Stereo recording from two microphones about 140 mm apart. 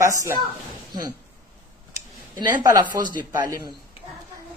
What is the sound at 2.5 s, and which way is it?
Speech, 10° right (ahead or behind).